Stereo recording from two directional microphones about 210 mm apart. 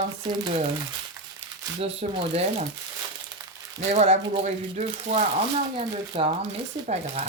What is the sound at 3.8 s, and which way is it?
Speech, 30° right (ahead or behind).